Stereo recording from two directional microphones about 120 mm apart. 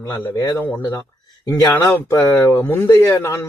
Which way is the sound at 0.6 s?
20° left (ahead or behind).